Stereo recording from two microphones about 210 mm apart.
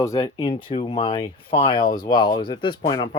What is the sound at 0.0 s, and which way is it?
Speech, 15° left (ahead or behind).